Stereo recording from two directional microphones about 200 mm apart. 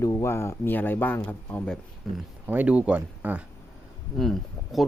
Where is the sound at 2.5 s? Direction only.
5° right (ahead or behind).